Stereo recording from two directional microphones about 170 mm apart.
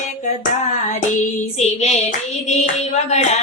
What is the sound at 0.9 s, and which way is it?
Hands, 40° left (ahead or behind).